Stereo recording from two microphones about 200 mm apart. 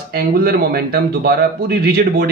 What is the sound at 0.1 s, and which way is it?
A man's voice, 50° right (ahead or behind).